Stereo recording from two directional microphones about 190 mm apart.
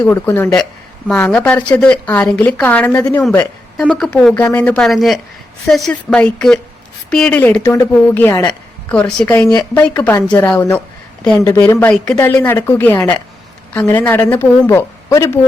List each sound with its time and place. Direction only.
0.0 s a woman's voice: 10° left (ahead or behind)